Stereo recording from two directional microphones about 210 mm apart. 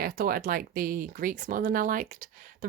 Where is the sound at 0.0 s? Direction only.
45° right (ahead or behind).